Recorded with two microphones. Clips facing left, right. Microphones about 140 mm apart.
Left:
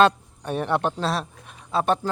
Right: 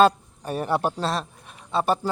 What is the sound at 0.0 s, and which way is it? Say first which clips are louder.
A man's voice: even; 5° right (ahead or behind).